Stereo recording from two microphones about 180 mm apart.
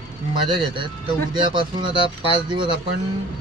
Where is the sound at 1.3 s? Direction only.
25° right (ahead or behind).